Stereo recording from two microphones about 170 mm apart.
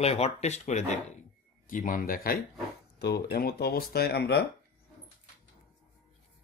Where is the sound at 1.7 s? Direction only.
55° left (ahead or behind).